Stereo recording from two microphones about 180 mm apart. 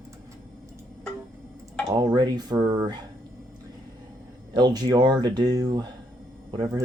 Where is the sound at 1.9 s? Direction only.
25° right (ahead or behind).